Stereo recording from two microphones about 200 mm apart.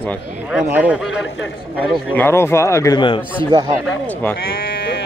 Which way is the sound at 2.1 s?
10° left (ahead or behind).